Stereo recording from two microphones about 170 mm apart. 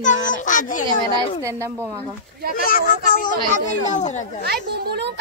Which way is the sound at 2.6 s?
55° left (ahead or behind).